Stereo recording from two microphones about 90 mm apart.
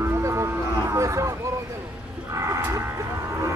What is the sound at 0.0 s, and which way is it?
Music, 30° right (ahead or behind).